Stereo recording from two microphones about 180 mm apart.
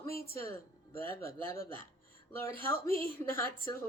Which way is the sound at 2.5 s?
55° left (ahead or behind).